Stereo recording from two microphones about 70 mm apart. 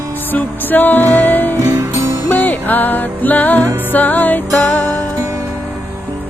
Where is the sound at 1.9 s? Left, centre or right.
Right.